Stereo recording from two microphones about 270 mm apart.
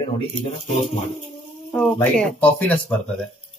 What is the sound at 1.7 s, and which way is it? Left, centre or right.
Speech, centre.